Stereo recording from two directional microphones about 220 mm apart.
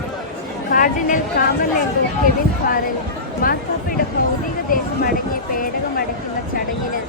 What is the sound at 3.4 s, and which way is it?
Speech, 40° left (ahead or behind).